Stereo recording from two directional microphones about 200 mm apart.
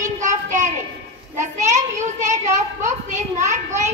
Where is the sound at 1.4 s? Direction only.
35° right (ahead or behind).